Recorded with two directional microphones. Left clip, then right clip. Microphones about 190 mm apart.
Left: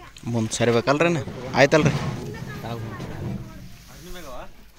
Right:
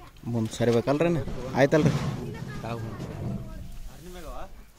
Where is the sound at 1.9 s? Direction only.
40° left (ahead or behind).